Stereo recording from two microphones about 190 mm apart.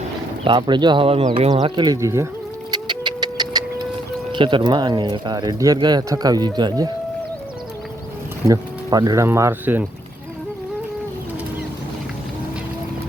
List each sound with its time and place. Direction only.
0.4 s speech: 25° right (ahead or behind)
2.7 s music: 25° right (ahead or behind)
4.3 s speech: 25° right (ahead or behind)
8.4 s speech: 20° right (ahead or behind)